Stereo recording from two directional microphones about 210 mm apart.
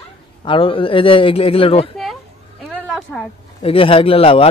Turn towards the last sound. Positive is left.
turn(degrees=25)  # may be behind; listen again after turning